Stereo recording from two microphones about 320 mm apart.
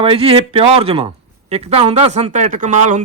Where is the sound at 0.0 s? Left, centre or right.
Centre.